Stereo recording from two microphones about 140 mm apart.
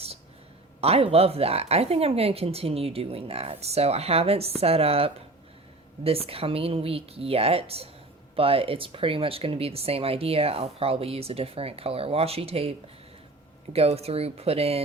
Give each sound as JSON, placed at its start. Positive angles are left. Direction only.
{"t": 0.8, "sound": "speech", "side_deg": -45}
{"t": 13.7, "sound": "speech", "side_deg": -45}